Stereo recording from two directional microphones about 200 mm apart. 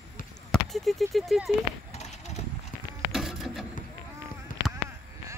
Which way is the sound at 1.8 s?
35° left (ahead or behind).